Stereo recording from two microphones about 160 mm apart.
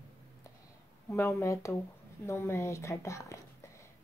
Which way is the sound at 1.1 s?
20° left (ahead or behind).